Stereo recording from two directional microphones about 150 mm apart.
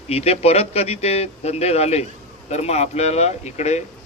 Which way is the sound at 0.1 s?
45° left (ahead or behind).